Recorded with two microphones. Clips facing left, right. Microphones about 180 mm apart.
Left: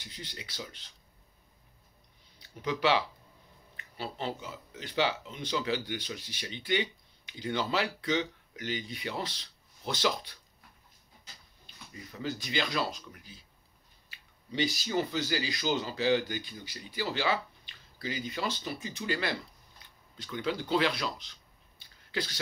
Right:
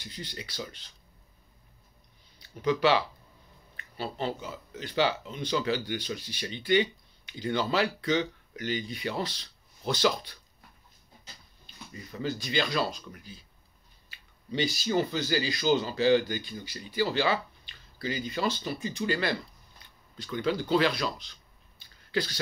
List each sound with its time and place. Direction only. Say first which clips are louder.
0.0 s speech: right 4 dB; 20° left (ahead or behind)
2.6 s speech: right 4 dB; 20° left (ahead or behind)
3.7 s a sound: right 3 dB; 15° left (ahead or behind)
4.7 s speech: right 3 dB; 20° left (ahead or behind)
12.2 s speech: right 3 dB; 15° left (ahead or behind)
14.5 s speech: right 3 dB; 15° left (ahead or behind)